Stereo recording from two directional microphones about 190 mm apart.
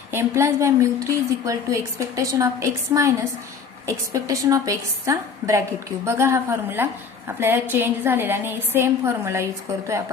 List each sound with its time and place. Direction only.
0.1 s a woman's voice: 15° right (ahead or behind)